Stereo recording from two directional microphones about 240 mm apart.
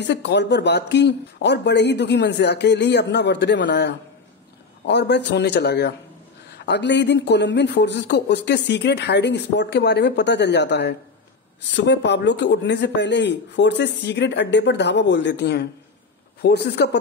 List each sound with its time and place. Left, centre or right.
0.0 s speech: left